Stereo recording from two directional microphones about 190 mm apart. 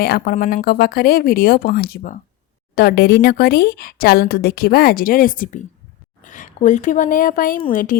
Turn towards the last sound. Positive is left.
turn(degrees=45)  # may be behind; listen again after turning